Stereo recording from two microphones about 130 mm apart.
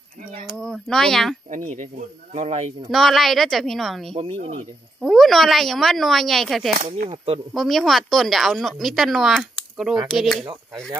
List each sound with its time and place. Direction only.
0.5 s speech: centre (ahead or behind)
1.5 s speech: 70° right (ahead or behind)
2.3 s speech: 55° right (ahead or behind)
2.9 s speech: centre (ahead or behind)
4.1 s speech: 45° right (ahead or behind)
5.0 s speech: centre (ahead or behind)
10.4 s speech: 35° right (ahead or behind)